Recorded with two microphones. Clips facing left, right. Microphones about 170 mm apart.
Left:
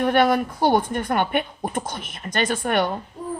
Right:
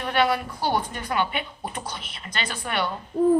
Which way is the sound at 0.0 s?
50° left (ahead or behind).